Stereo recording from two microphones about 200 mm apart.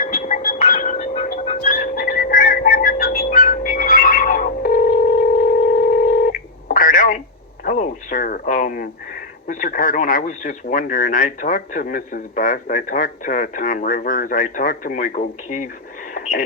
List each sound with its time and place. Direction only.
0.0 s music: 40° left (ahead or behind)
7.6 s radio: 40° left (ahead or behind)
9.5 s speech: 40° left (ahead or behind)
16.1 s radio: 40° left (ahead or behind)